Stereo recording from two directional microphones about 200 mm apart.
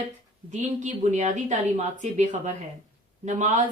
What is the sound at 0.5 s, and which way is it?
Speech, 40° right (ahead or behind).